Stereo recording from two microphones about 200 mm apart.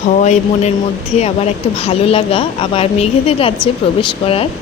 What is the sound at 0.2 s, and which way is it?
Speech, 35° left (ahead or behind).